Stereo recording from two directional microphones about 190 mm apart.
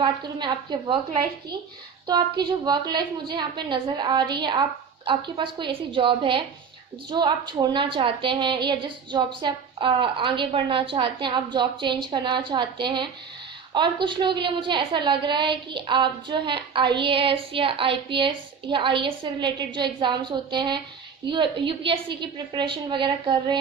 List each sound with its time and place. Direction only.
0.0 s a woman's voice: 25° right (ahead or behind)